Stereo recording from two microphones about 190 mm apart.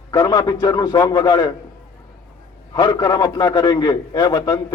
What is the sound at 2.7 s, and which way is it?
A man's voice, 20° left (ahead or behind).